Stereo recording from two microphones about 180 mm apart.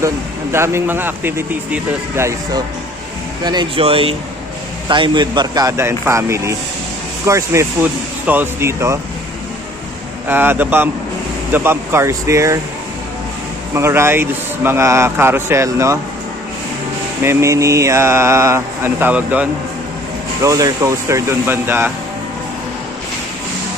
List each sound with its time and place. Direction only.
0.5 s speech: 15° right (ahead or behind)
10.2 s speech: 10° right (ahead or behind)
13.7 s speech: 15° right (ahead or behind)
17.2 s speech: 15° right (ahead or behind)
20.4 s speech: 20° right (ahead or behind)